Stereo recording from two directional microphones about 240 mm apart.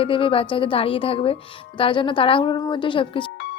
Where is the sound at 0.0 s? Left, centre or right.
Left.